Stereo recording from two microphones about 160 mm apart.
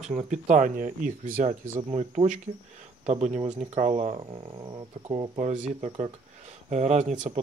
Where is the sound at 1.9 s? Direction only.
40° right (ahead or behind).